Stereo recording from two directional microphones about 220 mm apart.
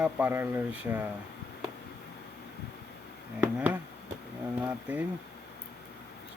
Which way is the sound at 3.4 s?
5° right (ahead or behind).